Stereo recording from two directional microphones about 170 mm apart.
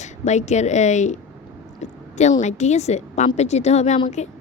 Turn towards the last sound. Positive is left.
turn(degrees=40)  # may be behind; listen again after turning